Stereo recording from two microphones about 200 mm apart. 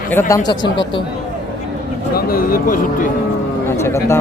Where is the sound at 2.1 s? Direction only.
45° left (ahead or behind).